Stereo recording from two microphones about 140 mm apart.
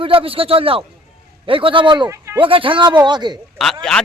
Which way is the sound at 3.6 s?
Centre (ahead or behind).